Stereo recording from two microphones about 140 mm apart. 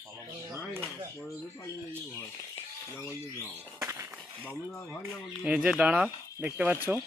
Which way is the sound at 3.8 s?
20° right (ahead or behind).